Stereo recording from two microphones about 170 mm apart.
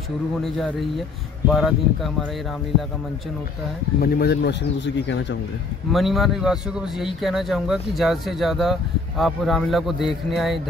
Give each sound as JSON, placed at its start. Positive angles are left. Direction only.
{"t": 0.4, "sound": "speech", "side_deg": 0}
{"t": 4.0, "sound": "speech", "side_deg": 70}
{"t": 5.9, "sound": "speech", "side_deg": 0}